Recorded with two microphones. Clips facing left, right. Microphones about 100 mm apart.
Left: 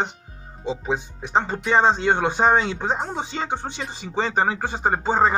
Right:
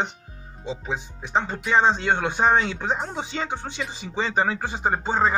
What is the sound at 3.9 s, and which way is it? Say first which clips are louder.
Speech: left 2 dB; 45° left (ahead or behind).